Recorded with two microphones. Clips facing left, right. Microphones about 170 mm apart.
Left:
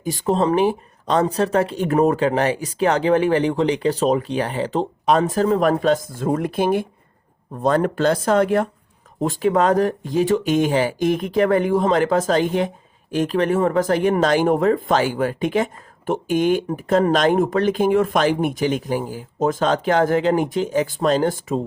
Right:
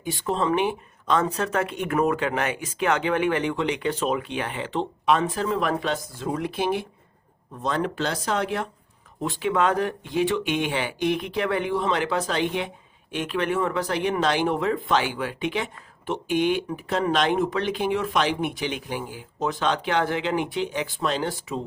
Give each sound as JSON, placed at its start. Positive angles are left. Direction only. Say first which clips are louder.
{"t": 0.0, "sound": "speech", "louder": "left 6 dB", "side_deg": 40}